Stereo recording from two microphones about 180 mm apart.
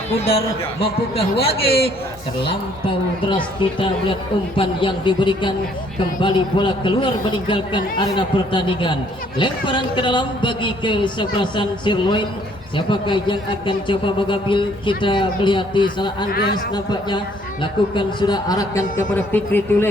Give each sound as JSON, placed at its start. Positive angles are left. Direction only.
{"t": 0.3, "sound": "a man's voice", "side_deg": 30}